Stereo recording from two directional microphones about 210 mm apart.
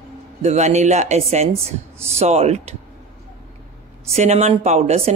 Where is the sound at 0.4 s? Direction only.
30° right (ahead or behind).